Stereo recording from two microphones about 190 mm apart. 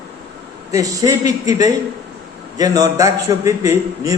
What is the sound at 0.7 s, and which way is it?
A man's voice, 15° right (ahead or behind).